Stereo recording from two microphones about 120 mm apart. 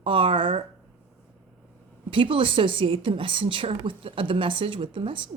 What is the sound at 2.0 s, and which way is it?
A woman's voice, 45° right (ahead or behind).